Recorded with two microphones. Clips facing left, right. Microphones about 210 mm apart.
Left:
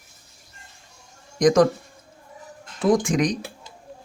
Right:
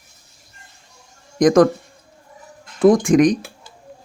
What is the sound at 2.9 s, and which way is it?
Speech, 55° right (ahead or behind).